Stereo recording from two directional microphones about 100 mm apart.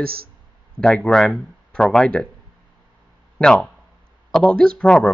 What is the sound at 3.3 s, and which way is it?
Speech, 10° left (ahead or behind).